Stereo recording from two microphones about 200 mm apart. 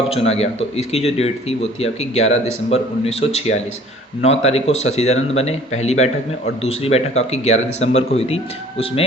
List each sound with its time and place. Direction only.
0.1 s speech: 30° left (ahead or behind)